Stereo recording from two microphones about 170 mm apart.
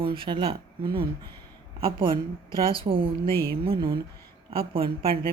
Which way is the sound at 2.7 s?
30° right (ahead or behind).